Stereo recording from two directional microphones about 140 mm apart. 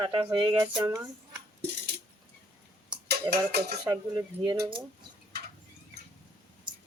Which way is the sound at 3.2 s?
30° right (ahead or behind).